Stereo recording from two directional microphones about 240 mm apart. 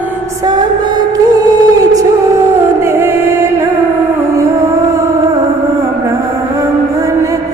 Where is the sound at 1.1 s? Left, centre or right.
Centre.